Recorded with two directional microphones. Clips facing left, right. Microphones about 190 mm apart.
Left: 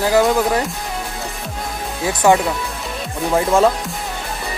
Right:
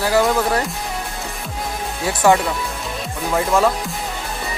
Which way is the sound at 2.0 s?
20° left (ahead or behind).